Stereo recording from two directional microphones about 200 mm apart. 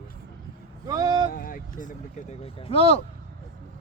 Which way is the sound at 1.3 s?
45° left (ahead or behind).